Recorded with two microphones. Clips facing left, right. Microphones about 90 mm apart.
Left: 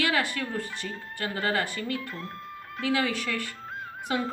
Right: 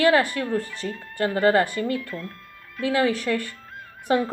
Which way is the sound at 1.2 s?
40° right (ahead or behind).